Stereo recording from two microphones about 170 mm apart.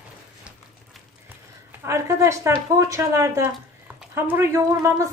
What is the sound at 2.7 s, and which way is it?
Speech, 20° right (ahead or behind).